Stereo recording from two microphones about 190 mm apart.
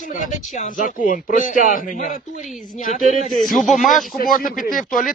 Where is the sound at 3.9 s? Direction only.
45° left (ahead or behind).